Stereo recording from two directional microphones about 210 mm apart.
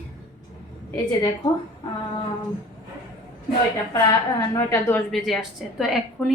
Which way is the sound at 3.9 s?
15° left (ahead or behind).